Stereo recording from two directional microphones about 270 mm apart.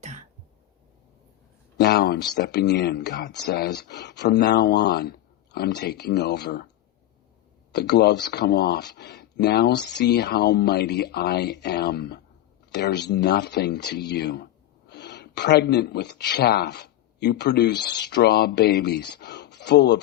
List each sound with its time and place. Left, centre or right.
0.0 s cough: right
1.8 s speech: left
7.7 s speech: left